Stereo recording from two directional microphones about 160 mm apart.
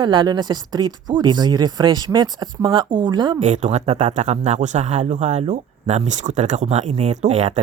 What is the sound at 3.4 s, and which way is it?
Speech, 45° right (ahead or behind).